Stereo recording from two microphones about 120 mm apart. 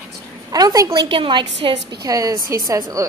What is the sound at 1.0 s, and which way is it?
A woman's voice, 45° right (ahead or behind).